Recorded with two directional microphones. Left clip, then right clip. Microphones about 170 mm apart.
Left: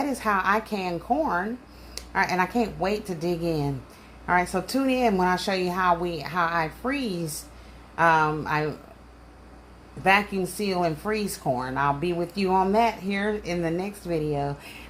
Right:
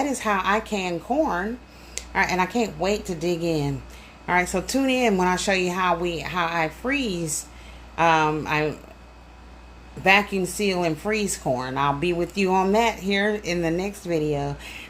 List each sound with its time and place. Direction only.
0.0 s speech: 15° right (ahead or behind)
10.0 s speech: 20° right (ahead or behind)